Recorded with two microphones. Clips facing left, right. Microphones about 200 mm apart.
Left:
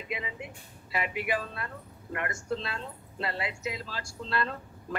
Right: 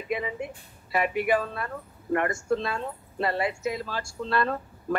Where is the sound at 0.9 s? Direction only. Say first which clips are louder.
Right 7 dB; 50° right (ahead or behind).